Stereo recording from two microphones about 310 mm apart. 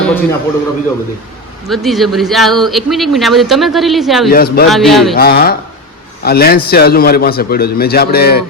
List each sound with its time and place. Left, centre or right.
0.0 s a man's voice: centre
1.6 s speech: centre
4.3 s a man's voice: left
4.7 s speech: centre
5.1 s a man's voice: left